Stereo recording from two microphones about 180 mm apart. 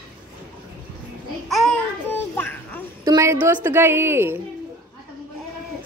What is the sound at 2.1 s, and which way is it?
Children playing, 10° left (ahead or behind).